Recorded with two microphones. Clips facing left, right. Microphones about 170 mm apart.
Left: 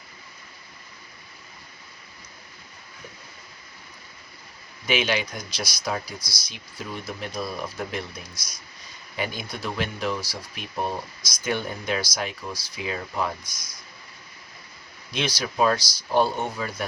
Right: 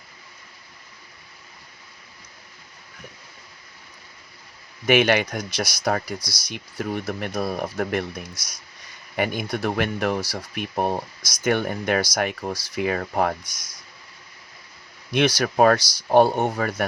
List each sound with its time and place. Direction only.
4.9 s speech: 60° right (ahead or behind)
9.1 s speech: 60° right (ahead or behind)
15.1 s speech: 70° right (ahead or behind); by 16.5 s 50° right (ahead or behind)
16.6 s speech: 70° right (ahead or behind)